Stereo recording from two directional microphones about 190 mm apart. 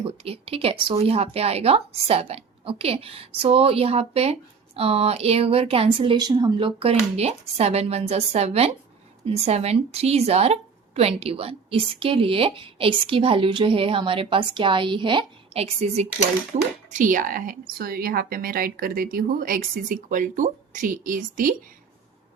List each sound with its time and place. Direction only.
0.0 s a woman's voice: 30° right (ahead or behind)